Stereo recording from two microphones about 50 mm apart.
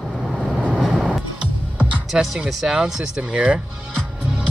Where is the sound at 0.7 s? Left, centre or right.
Centre.